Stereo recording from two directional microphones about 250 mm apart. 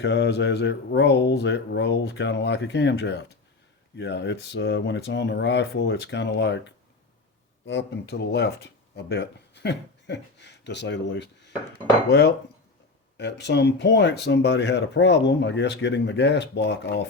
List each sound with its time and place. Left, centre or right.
0.0 s speech: left
12.0 s dishes: left
13.1 s speech: left